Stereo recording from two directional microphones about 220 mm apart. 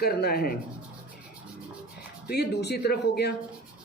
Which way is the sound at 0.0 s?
45° left (ahead or behind).